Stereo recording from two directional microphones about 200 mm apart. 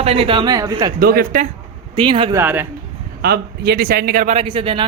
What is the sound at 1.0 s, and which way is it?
Speech, 50° right (ahead or behind).